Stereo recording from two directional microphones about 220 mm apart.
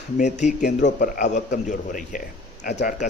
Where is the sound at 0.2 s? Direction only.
35° left (ahead or behind).